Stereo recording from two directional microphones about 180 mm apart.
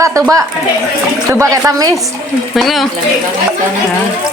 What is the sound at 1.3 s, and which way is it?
Speech, 15° right (ahead or behind).